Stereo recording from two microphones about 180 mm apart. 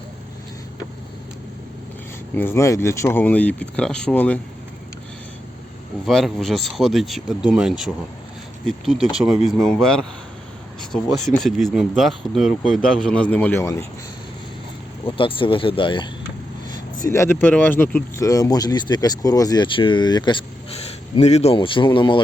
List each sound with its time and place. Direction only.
2.3 s speech: 10° left (ahead or behind)
6.1 s speech: centre (ahead or behind)
11.4 s speech: centre (ahead or behind)
15.0 s speech: 30° left (ahead or behind)
17.1 s speech: 15° left (ahead or behind)
21.2 s speech: 35° left (ahead or behind)